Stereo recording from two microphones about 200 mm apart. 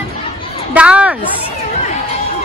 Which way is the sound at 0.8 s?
5° right (ahead or behind).